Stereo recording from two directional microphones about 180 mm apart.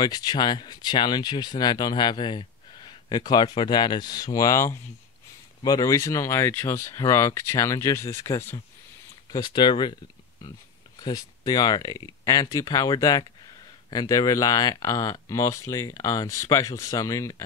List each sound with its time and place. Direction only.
0.0 s speech: 25° left (ahead or behind)
9.3 s speech: 25° left (ahead or behind)
11.0 s speech: 20° left (ahead or behind)